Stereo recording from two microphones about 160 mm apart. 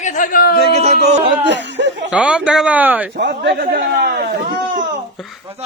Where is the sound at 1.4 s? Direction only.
90° right.